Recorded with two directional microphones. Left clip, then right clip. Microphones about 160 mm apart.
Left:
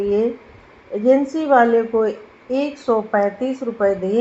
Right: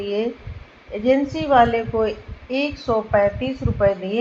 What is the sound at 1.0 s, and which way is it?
Speech, 40° left (ahead or behind).